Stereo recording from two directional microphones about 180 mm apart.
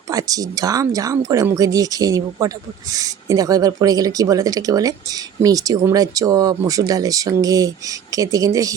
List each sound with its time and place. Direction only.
0.1 s speech: 20° right (ahead or behind)